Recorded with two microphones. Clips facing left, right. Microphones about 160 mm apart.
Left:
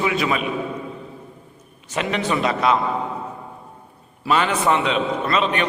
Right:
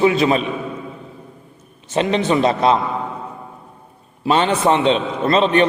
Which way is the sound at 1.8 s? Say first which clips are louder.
Right 6 dB; 25° right (ahead or behind).